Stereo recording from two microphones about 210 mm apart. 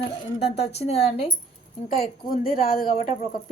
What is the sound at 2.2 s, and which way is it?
Speech, 45° left (ahead or behind).